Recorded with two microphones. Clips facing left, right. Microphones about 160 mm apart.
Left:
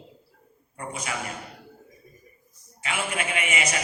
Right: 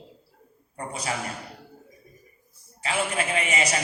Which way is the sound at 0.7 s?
35° right (ahead or behind).